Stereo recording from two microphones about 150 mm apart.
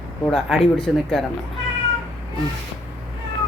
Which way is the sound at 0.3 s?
Centre (ahead or behind).